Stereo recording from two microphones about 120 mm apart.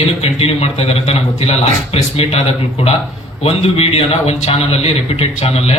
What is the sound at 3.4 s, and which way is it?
A man's voice, 60° left (ahead or behind).